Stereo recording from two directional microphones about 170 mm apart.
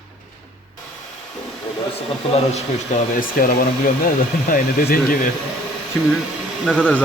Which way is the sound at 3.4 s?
55° left (ahead or behind).